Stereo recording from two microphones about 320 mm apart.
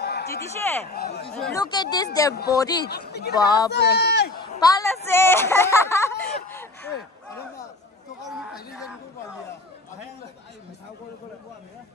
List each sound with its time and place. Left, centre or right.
0.0 s a sound: left
0.8 s speech: left
1.3 s speech: centre
1.6 s speech: centre
2.9 s speech: left
3.4 s speech: centre
3.7 s speech: left
4.4 s a sound: centre